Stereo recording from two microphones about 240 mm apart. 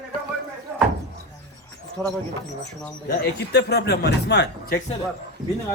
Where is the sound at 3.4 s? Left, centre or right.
Left.